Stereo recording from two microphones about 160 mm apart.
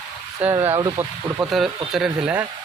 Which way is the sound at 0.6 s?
20° right (ahead or behind).